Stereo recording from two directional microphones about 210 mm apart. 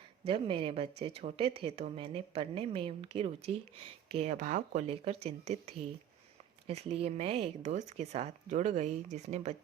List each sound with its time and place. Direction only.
0.3 s speech: 25° right (ahead or behind)